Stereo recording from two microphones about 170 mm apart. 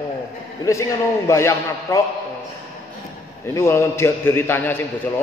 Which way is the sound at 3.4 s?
15° left (ahead or behind).